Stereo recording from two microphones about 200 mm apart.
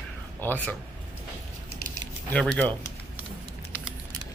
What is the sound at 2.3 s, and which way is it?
Speech, 5° left (ahead or behind).